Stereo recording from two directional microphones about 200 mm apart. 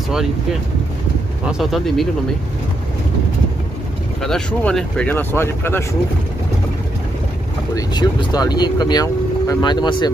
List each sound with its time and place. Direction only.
0.1 s speech: centre (ahead or behind)
4.2 s speech: 5° left (ahead or behind)
7.7 s speech: 20° left (ahead or behind)